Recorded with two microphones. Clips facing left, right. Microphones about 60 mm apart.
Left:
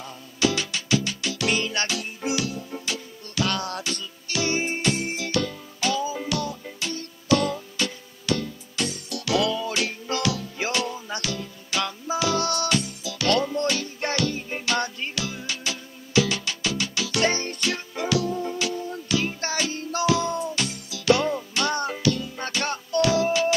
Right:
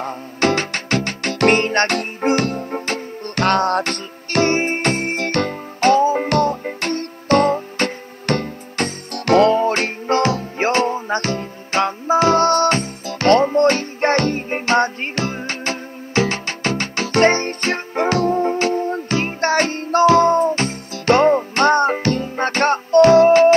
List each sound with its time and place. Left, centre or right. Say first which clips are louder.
0.0 s music: right 6 dB; right